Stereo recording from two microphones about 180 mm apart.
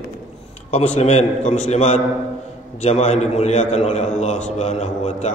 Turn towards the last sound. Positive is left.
turn(degrees=40)  # may be behind; listen again after turning